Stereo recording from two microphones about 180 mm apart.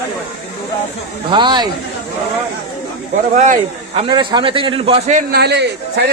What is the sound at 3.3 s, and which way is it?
Speech, 45° right (ahead or behind).